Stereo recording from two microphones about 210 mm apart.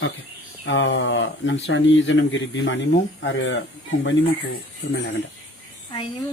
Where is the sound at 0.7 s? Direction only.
65° left (ahead or behind).